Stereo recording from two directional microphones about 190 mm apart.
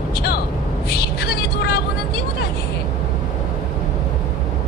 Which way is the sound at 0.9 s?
55° left (ahead or behind).